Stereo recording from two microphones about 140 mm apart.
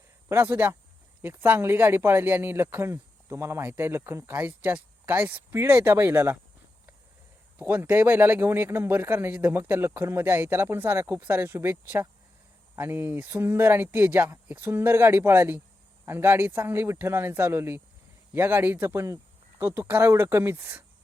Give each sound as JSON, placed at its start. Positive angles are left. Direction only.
{"t": 0.3, "sound": "speech", "side_deg": -15}
{"t": 7.6, "sound": "speech", "side_deg": -15}